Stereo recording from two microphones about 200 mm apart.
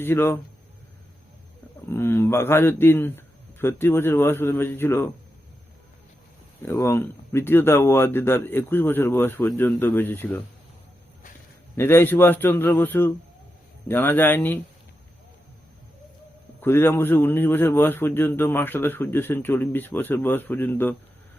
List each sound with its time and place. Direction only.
0.0 s a man's voice: 10° left (ahead or behind)
1.9 s a man's voice: 10° left (ahead or behind)
6.6 s a man's voice: 15° left (ahead or behind)
11.8 s a man's voice: 10° left (ahead or behind)
16.6 s a man's voice: 10° left (ahead or behind)